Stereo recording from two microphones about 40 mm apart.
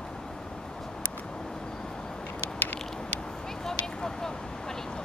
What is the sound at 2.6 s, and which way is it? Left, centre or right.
Vehicle, left.